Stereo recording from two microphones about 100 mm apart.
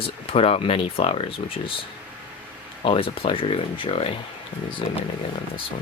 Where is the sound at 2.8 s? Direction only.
65° left (ahead or behind).